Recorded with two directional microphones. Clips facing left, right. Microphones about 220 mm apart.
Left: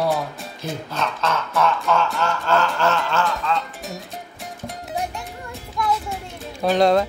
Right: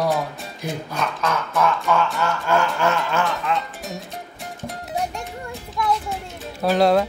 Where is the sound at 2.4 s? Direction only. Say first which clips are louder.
Even; 10° right (ahead or behind).